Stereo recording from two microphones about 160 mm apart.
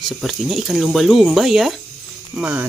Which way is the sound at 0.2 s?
Centre (ahead or behind).